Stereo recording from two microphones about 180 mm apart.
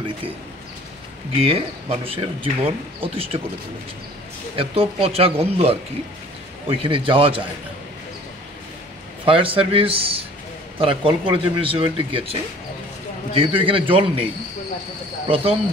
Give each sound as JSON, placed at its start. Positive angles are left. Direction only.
{"t": 1.4, "sound": "speech", "side_deg": -35}
{"t": 4.6, "sound": "speech", "side_deg": -35}
{"t": 9.2, "sound": "speech", "side_deg": -30}
{"t": 15.2, "sound": "speech", "side_deg": -30}